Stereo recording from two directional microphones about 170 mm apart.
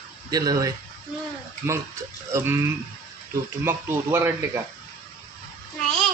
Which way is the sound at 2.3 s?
15° right (ahead or behind).